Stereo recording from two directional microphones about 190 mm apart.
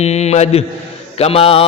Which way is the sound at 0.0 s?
35° left (ahead or behind).